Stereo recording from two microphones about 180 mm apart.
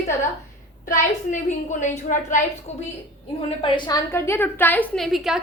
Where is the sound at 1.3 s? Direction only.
45° left (ahead or behind).